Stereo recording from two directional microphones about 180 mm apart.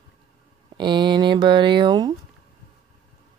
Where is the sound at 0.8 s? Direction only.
25° right (ahead or behind).